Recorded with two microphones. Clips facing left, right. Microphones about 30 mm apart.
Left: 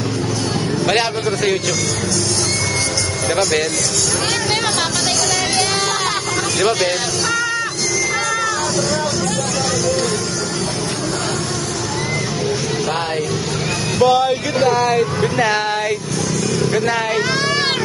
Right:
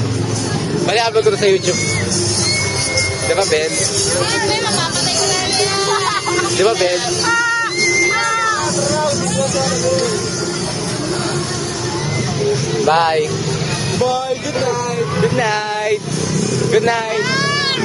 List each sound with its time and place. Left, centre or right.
3.3 s speech: centre
6.6 s speech: centre
12.9 s speech: right
14.0 s speech: centre
15.1 s speech: centre